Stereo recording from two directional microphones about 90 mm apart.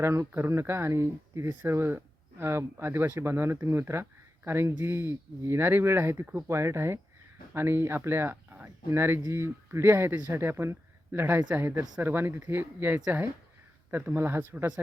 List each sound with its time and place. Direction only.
0.0 s speech: 30° right (ahead or behind)